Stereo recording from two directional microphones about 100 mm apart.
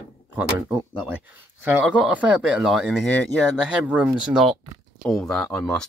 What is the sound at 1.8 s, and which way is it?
Speech, 10° right (ahead or behind).